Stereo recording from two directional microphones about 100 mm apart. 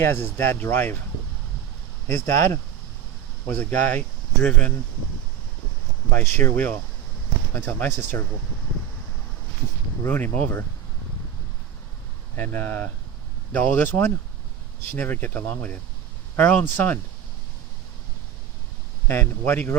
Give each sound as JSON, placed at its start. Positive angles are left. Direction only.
{"t": 0.0, "sound": "speech", "side_deg": 20}
{"t": 2.0, "sound": "speech", "side_deg": 20}
{"t": 6.1, "sound": "speech", "side_deg": 20}
{"t": 10.0, "sound": "speech", "side_deg": 20}
{"t": 12.4, "sound": "speech", "side_deg": 20}
{"t": 19.0, "sound": "speech", "side_deg": 20}